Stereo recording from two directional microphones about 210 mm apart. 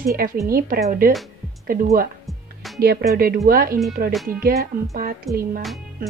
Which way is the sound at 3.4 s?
45° right (ahead or behind).